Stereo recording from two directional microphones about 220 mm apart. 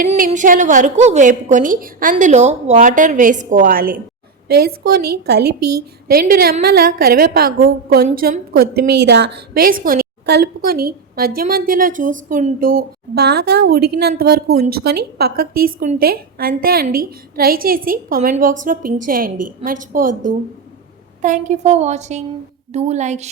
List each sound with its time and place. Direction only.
0.1 s a woman's voice: 30° right (ahead or behind)